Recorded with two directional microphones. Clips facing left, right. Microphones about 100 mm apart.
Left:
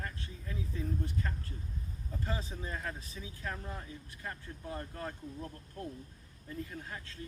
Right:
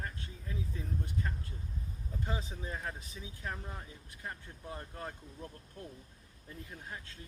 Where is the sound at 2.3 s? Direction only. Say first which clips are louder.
Left 1 dB; 20° right (ahead or behind).